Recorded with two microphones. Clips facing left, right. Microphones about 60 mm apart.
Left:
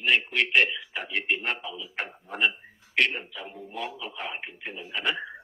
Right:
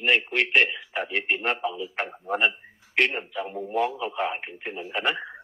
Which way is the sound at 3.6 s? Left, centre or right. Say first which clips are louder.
Right 10 dB; right.